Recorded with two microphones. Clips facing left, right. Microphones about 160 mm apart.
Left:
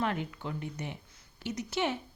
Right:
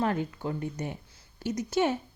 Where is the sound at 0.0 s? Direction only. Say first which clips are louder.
Right 4 dB; 35° right (ahead or behind).